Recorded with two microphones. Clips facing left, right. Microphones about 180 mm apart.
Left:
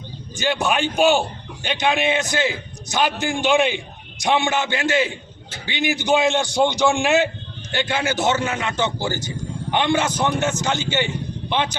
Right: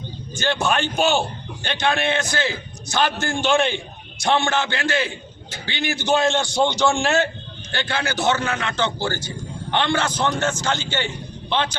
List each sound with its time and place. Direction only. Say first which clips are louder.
0.3 s a man's voice: left 1 dB; 15° left (ahead or behind)